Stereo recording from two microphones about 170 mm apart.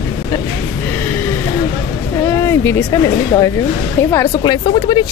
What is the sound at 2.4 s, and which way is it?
Speech, 15° left (ahead or behind).